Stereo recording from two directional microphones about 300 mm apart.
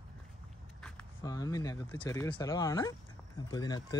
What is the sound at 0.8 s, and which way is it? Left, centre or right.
Speech, centre.